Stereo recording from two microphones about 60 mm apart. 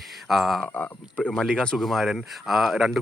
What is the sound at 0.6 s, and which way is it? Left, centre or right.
Speech, left.